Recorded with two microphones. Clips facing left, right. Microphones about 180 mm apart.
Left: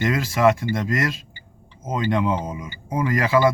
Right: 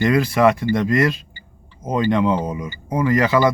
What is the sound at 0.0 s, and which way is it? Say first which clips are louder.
Speech: right 3 dB; centre (ahead or behind).